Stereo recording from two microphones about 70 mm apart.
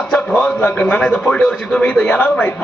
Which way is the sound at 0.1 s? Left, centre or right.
Centre.